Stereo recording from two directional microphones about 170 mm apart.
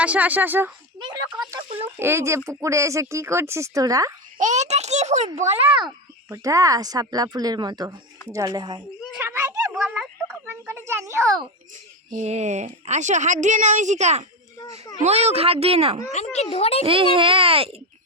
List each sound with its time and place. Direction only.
0.0 s speech: 10° right (ahead or behind)
1.4 s speech: 25° right (ahead or behind)
4.4 s a child's voice: 45° right (ahead or behind)
6.2 s speech: 15° right (ahead or behind)
9.2 s a sound: 15° right (ahead or behind)
9.7 s a sound: 5° right (ahead or behind)
10.5 s a sound: 15° right (ahead or behind)
12.1 s a woman's voice: 40° right (ahead or behind)
16.1 s speech: 40° left (ahead or behind)
16.8 s speech: 30° right (ahead or behind)